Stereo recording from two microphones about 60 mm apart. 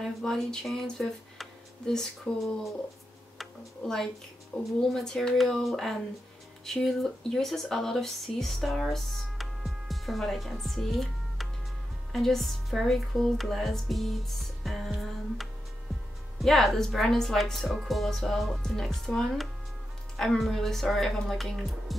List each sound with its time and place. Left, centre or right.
0.0 s speech: centre
3.3 s tick-tock: centre
4.5 s speech: centre
16.3 s speech: centre